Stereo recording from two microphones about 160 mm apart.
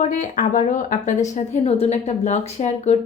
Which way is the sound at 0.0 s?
55° left (ahead or behind).